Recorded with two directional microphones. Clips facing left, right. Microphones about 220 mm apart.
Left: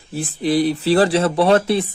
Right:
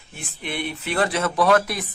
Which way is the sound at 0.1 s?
35° left (ahead or behind).